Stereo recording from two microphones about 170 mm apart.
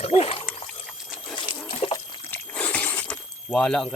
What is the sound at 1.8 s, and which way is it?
Trickle, 35° left (ahead or behind).